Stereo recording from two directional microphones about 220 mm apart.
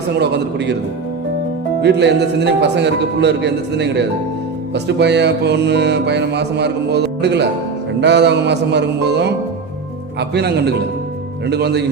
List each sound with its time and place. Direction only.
0.2 s music: 50° right (ahead or behind)
1.8 s music: 50° right (ahead or behind)